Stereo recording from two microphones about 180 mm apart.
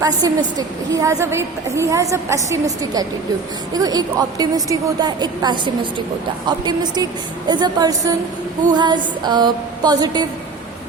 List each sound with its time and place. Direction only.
0.0 s a woman's voice: 20° right (ahead or behind)